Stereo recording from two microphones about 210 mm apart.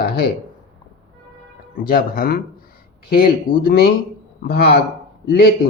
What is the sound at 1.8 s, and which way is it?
Speech, 45° left (ahead or behind).